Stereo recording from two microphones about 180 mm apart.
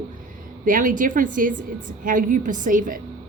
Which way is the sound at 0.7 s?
45° right (ahead or behind).